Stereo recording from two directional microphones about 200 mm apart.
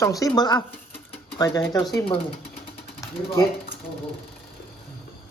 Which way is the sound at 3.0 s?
15° left (ahead or behind).